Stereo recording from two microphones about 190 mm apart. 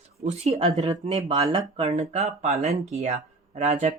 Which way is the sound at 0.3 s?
35° right (ahead or behind).